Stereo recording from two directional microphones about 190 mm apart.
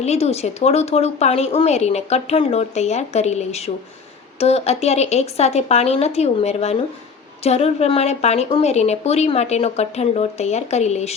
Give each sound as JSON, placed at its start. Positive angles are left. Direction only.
{"t": 0.0, "sound": "speech", "side_deg": 35}